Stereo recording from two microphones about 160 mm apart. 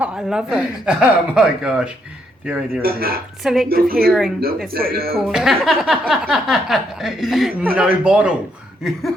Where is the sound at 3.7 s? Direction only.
70° right (ahead or behind).